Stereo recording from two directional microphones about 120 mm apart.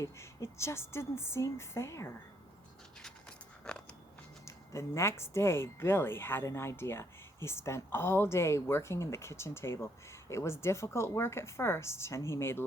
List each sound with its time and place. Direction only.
0.0 s speech: 25° left (ahead or behind)
3.0 s a sound: 5° left (ahead or behind)
4.4 s speech: 25° left (ahead or behind)